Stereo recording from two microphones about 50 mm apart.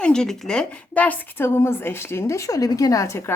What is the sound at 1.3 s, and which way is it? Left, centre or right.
Speech, left.